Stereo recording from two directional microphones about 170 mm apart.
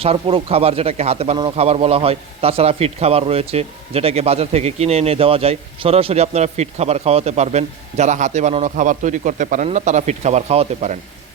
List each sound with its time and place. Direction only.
0.0 s a man's voice: 35° right (ahead or behind)